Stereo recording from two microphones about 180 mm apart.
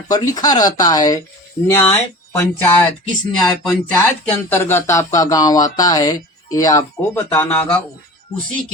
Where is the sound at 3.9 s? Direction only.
10° left (ahead or behind).